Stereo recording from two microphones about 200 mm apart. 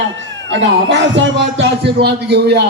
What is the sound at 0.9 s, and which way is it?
A man's voice, 65° right (ahead or behind).